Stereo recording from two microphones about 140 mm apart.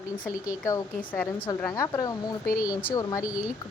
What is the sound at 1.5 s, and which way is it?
A woman's voice, 25° left (ahead or behind).